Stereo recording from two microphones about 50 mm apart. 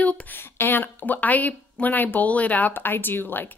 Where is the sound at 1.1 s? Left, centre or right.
Left.